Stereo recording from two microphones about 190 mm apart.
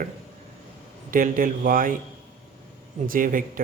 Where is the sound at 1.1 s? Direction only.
45° right (ahead or behind).